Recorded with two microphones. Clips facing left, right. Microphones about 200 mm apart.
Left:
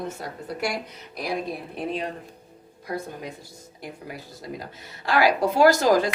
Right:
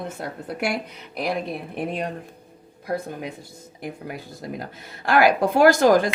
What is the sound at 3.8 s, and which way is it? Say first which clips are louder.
A woman's voice: right 4 dB; 55° right (ahead or behind).